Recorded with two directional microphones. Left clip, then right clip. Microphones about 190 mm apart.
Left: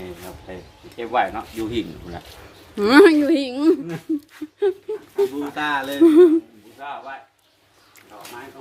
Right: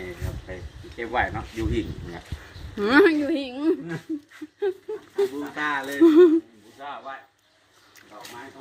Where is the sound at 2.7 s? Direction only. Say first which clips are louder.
Left 6 dB; 20° left (ahead or behind).